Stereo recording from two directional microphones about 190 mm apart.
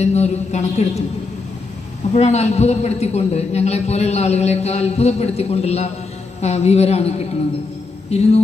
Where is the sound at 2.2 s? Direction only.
35° left (ahead or behind).